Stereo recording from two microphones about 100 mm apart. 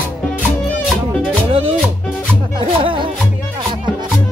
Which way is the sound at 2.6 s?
60° right (ahead or behind).